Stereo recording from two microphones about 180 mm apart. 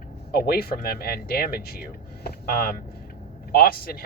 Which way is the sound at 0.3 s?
60° left (ahead or behind).